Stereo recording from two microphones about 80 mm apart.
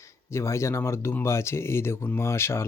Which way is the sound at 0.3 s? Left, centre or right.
Left.